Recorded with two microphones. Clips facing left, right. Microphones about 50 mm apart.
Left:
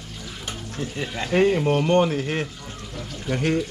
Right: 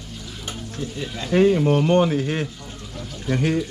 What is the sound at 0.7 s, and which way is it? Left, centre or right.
Speech, left.